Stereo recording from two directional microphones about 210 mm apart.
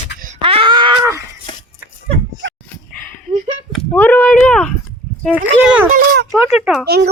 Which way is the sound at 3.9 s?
10° left (ahead or behind).